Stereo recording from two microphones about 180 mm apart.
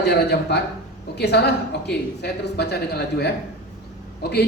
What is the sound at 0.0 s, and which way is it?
A woman's voice, 65° left (ahead or behind).